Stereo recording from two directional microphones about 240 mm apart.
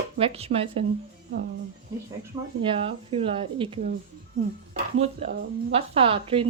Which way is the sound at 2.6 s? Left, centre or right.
Right.